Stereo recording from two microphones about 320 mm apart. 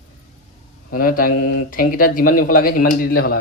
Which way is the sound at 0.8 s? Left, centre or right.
Left.